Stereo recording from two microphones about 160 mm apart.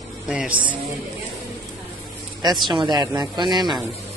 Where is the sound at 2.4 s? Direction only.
25° right (ahead or behind).